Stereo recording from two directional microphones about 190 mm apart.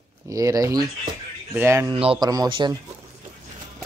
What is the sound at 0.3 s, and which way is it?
Speech, 15° right (ahead or behind).